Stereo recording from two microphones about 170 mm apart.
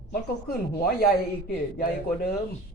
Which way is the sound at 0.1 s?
60° left (ahead or behind).